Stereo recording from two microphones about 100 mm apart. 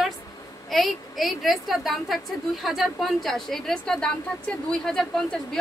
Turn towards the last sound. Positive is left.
turn(degrees=5)  # may be behind; listen again after turning